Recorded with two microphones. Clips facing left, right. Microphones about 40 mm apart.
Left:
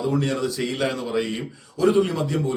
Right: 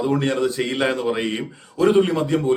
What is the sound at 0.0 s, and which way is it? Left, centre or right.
Speech, right.